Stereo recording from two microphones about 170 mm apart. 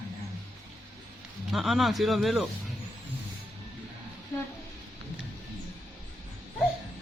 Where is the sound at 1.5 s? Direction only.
Centre (ahead or behind).